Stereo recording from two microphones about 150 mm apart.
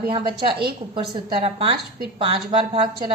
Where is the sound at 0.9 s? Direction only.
35° right (ahead or behind).